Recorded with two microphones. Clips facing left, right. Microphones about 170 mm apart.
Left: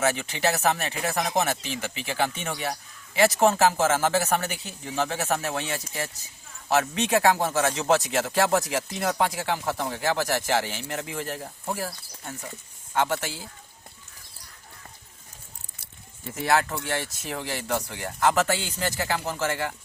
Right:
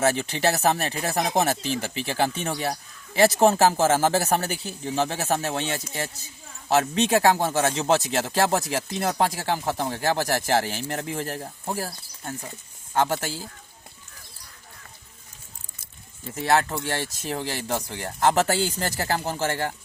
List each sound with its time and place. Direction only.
0.0 s speech: 35° right (ahead or behind)
12.9 s speech: 35° right (ahead or behind)
16.5 s speech: 30° right (ahead or behind)